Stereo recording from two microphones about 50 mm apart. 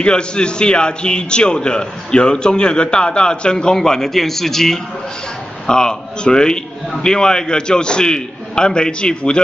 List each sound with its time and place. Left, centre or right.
0.0 s a man's voice: centre